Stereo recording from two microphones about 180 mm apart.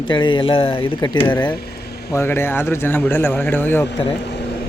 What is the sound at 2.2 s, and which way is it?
Speech, 15° left (ahead or behind).